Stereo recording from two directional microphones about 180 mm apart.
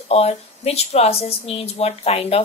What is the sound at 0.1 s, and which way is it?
A woman's voice, 35° left (ahead or behind).